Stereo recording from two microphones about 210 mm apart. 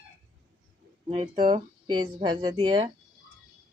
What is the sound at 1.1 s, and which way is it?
Speech, 35° right (ahead or behind).